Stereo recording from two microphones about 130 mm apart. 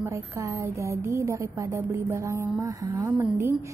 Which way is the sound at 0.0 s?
20° right (ahead or behind).